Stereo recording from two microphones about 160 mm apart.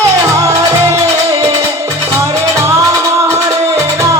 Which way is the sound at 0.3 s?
20° right (ahead or behind).